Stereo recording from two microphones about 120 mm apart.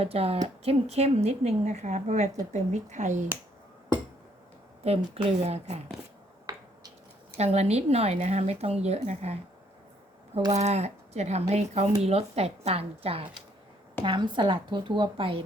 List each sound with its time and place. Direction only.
0.0 s speech: 55° right (ahead or behind); by 3.2 s 90° right
4.8 s speech: 55° right (ahead or behind)
6.4 s finger snapping: 30° right (ahead or behind)
7.3 s speech: 65° right (ahead or behind)
10.5 s a woman's voice: 65° right (ahead or behind); by 15.4 s 50° right (ahead or behind)